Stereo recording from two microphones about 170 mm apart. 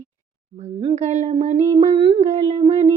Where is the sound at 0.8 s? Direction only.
40° right (ahead or behind).